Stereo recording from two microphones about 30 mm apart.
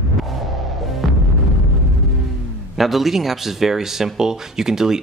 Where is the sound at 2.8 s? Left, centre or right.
Centre.